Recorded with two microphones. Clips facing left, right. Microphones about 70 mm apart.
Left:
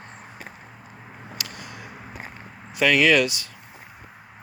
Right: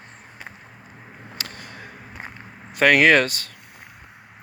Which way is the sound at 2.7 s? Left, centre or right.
Right.